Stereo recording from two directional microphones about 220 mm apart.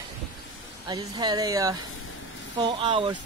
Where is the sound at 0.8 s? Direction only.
20° right (ahead or behind).